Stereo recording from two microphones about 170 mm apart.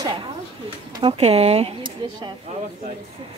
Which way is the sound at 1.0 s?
35° right (ahead or behind).